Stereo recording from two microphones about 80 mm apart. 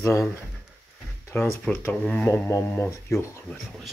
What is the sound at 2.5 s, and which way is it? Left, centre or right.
Speech, left.